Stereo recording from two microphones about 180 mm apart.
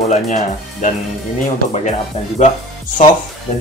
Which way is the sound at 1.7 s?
40° left (ahead or behind).